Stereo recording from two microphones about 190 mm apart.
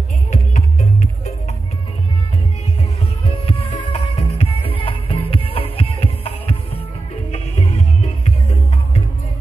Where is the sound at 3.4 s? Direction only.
30° left (ahead or behind).